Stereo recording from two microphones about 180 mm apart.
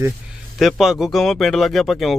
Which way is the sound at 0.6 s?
Centre (ahead or behind).